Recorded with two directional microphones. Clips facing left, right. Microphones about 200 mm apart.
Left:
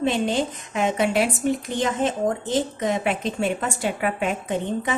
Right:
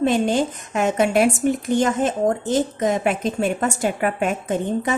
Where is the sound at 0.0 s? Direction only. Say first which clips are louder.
Right 4 dB; 50° right (ahead or behind).